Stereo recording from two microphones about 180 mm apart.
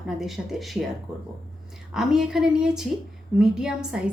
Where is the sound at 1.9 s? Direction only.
Centre (ahead or behind).